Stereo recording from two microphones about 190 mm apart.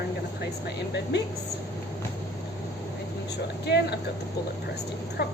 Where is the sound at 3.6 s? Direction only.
60° left (ahead or behind).